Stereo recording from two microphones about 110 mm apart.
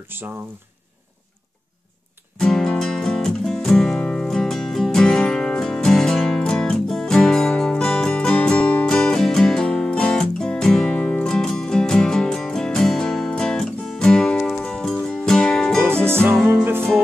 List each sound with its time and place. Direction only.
0.1 s speech: 20° right (ahead or behind)
2.3 s music: 5° left (ahead or behind)
16.1 s music: 20° right (ahead or behind)